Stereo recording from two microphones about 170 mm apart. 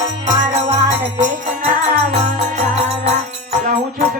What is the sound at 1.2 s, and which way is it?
Speech, 50° right (ahead or behind).